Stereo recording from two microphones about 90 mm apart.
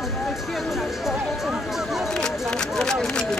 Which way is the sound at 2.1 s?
5° left (ahead or behind).